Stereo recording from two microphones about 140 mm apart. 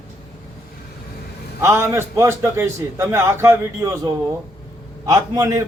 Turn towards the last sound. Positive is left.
turn(degrees=-25)  # may be behind; listen again after turning